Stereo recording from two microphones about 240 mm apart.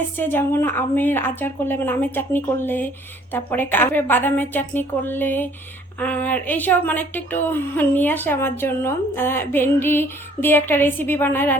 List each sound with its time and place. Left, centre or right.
0.2 s a woman's voice: centre